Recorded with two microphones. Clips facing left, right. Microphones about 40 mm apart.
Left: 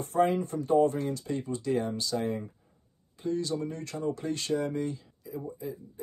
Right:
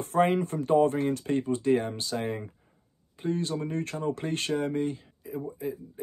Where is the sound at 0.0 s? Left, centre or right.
Right.